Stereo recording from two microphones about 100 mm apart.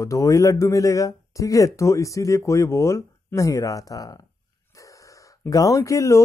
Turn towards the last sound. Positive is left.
turn(degrees=30)  # may be behind; listen again after turning